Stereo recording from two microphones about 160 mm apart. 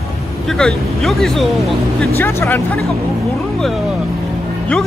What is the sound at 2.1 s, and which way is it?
Speech, 15° left (ahead or behind).